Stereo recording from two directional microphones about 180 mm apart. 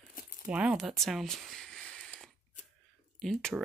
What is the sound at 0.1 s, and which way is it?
Crumpling, 50° left (ahead or behind).